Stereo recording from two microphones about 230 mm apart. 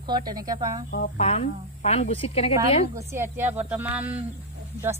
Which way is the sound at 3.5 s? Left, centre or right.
Centre.